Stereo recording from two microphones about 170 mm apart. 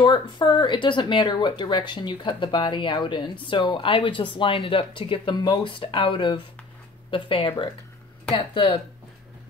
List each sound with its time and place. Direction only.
0.0 s speech: 25° left (ahead or behind)